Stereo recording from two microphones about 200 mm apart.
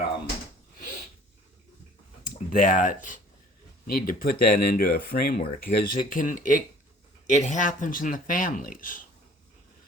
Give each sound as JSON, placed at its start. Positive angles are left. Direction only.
{"t": 2.2, "sound": "speech", "side_deg": 45}